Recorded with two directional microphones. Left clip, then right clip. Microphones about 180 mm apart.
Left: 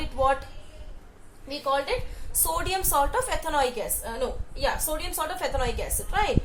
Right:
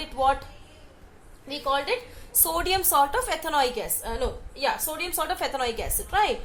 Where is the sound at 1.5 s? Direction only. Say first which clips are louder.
Even; 35° right (ahead or behind).